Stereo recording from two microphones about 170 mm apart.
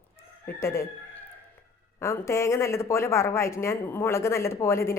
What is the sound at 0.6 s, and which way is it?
Speech, 15° left (ahead or behind).